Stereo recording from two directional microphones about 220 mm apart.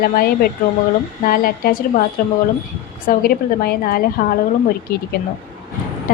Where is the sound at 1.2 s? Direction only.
40° left (ahead or behind).